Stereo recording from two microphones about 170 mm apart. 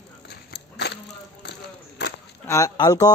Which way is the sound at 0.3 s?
75° left (ahead or behind).